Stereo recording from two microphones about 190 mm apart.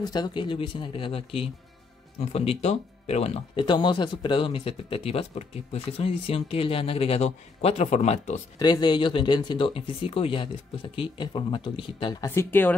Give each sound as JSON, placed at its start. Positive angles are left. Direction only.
{"t": 0.0, "sound": "speech", "side_deg": 20}
{"t": 8.5, "sound": "speech", "side_deg": 20}